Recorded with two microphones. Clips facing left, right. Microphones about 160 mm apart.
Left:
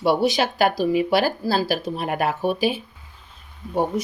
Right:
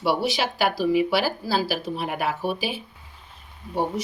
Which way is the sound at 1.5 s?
5° right (ahead or behind).